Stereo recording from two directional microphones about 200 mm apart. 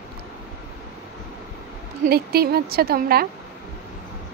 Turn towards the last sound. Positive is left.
turn(degrees=-50)  # may be behind; listen again after turning